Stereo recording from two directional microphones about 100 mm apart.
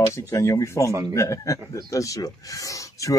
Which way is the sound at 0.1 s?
30° left (ahead or behind).